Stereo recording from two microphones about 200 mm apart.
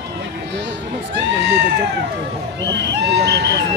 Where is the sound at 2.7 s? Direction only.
55° right (ahead or behind).